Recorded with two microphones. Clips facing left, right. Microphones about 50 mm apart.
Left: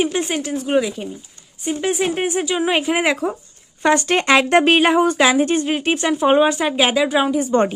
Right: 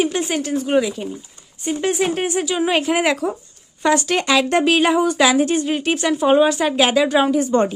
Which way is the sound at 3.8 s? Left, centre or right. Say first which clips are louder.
Left 1 dB; left.